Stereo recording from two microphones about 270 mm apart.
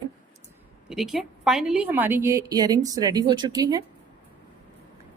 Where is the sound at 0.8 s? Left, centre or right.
Centre.